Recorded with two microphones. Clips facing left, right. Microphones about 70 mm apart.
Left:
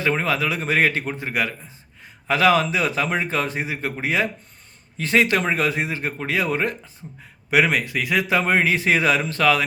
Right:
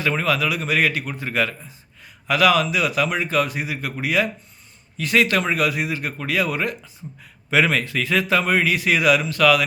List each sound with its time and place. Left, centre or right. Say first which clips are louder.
0.0 s a man's voice: even; left
7.5 s a man's voice: even; centre